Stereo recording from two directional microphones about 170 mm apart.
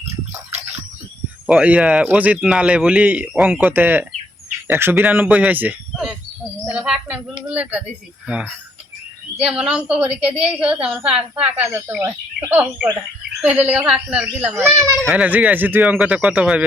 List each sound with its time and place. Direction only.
1.5 s a child's voice: 5° right (ahead or behind)
9.5 s a woman's voice: 5° right (ahead or behind)